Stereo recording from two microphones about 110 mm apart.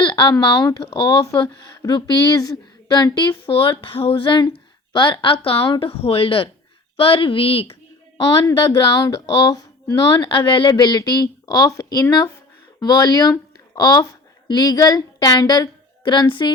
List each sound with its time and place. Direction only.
0.0 s speech: 45° left (ahead or behind)
3.5 s a woman's voice: 50° left (ahead or behind)
8.5 s a woman's voice: 40° left (ahead or behind)